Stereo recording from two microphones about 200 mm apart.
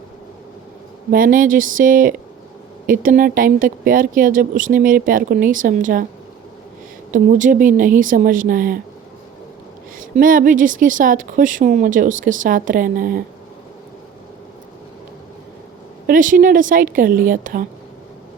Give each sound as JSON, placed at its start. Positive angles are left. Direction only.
{"t": 1.1, "sound": "speech", "side_deg": -45}
{"t": 7.1, "sound": "speech", "side_deg": -40}
{"t": 10.0, "sound": "a woman's voice", "side_deg": -45}
{"t": 16.0, "sound": "speech", "side_deg": -40}